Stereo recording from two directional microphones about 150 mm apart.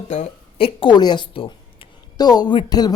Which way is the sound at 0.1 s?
50° left (ahead or behind).